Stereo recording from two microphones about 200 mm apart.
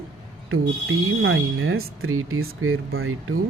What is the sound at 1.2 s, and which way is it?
Speech, 85° right.